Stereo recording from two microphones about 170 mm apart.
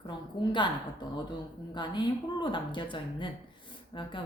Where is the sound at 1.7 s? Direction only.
25° left (ahead or behind).